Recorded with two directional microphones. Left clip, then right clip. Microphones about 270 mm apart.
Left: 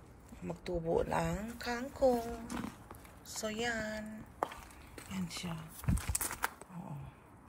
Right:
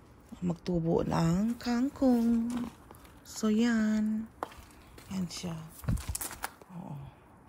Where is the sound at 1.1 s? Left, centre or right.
Right.